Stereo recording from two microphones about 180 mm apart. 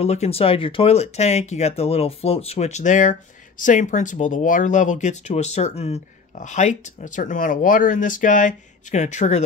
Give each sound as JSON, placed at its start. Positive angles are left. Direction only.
{"t": 0.0, "sound": "speech", "side_deg": 35}